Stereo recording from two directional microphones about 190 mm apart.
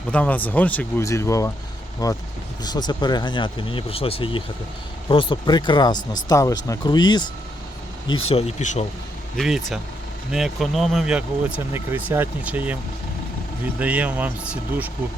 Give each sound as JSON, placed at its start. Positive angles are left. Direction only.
{"t": 0.1, "sound": "speech", "side_deg": 5}
{"t": 8.3, "sound": "speech", "side_deg": 35}
{"t": 9.3, "sound": "speech", "side_deg": 0}
{"t": 13.7, "sound": "speech", "side_deg": -10}